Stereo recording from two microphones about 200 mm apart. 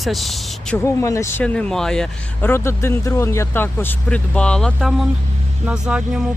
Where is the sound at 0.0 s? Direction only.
Centre (ahead or behind).